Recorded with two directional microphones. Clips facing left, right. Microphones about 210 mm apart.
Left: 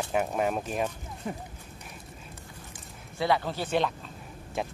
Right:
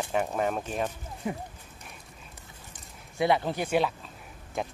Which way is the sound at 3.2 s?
20° right (ahead or behind).